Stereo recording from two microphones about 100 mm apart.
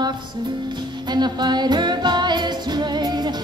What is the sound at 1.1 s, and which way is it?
Music, 45° right (ahead or behind).